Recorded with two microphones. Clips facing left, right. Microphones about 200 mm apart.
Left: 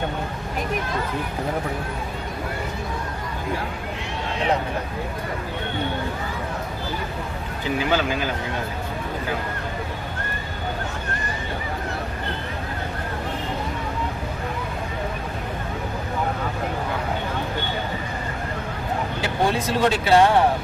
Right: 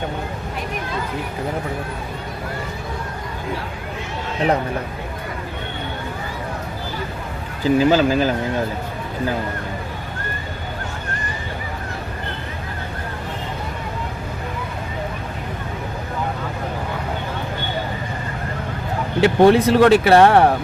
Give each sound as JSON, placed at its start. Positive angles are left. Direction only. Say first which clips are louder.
{"t": 7.6, "sound": "speech", "louder": "right 8 dB", "side_deg": -35}
{"t": 19.2, "sound": "speech", "louder": "right 12 dB", "side_deg": -65}